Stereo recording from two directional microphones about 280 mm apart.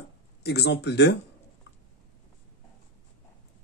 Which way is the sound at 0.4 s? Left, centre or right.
Left.